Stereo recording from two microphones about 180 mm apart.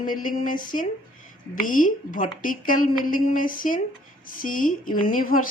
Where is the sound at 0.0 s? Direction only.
50° left (ahead or behind).